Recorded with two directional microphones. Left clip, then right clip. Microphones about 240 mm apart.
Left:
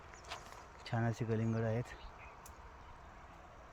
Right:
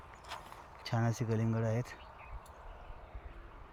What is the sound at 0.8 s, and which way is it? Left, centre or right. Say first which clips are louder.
Speech: right 3 dB; right.